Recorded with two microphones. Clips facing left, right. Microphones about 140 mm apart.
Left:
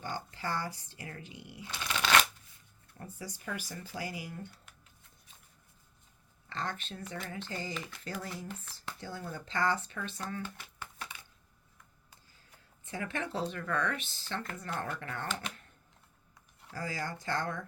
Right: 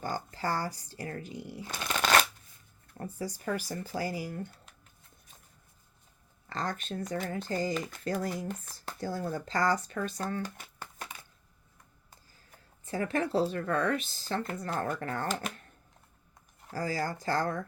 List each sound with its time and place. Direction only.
0.0 s speech: 40° right (ahead or behind)
6.5 s speech: 40° right (ahead or behind)
12.1 s a sound: 40° right (ahead or behind)
13.5 s speech: 35° right (ahead or behind)